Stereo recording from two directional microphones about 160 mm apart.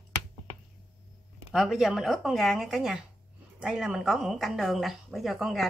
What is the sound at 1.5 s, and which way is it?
Speech, centre (ahead or behind).